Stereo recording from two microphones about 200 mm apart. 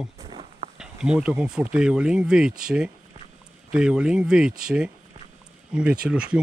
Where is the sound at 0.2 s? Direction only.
30° right (ahead or behind).